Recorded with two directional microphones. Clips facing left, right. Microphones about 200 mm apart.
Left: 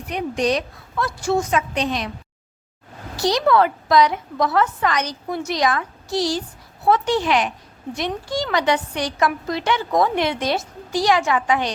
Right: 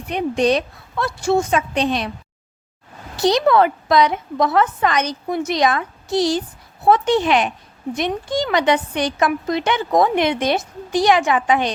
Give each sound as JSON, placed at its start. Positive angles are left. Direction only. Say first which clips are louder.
{"t": 0.1, "sound": "a woman's voice", "louder": "right 4 dB", "side_deg": -25}
{"t": 3.2, "sound": "a woman's voice", "louder": "right 2 dB", "side_deg": -20}